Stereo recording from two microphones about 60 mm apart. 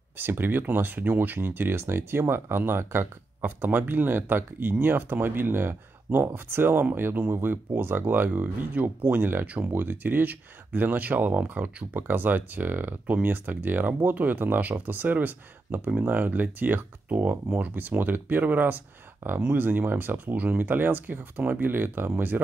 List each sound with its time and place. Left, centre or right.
0.2 s speech: right